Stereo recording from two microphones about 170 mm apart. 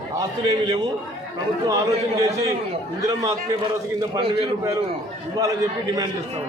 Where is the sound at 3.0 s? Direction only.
20° right (ahead or behind).